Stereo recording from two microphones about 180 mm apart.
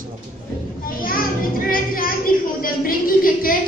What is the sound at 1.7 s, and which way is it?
Music, 50° left (ahead or behind).